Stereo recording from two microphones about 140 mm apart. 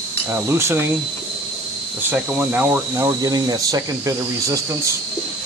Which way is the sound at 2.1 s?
15° right (ahead or behind).